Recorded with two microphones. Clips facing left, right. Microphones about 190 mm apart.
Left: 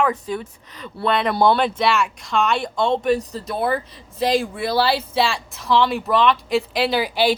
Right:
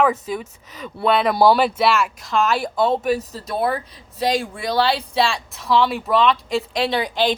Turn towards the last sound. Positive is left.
turn(degrees=10)  # may be behind; listen again after turning